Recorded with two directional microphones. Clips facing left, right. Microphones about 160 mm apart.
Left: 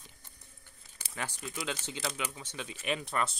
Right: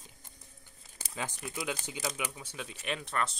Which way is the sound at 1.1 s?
20° right (ahead or behind).